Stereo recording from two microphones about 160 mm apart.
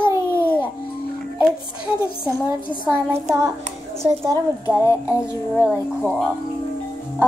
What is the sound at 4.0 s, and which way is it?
A child's voice, 15° right (ahead or behind).